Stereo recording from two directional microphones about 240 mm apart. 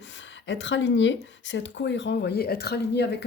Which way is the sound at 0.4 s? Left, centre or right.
Left.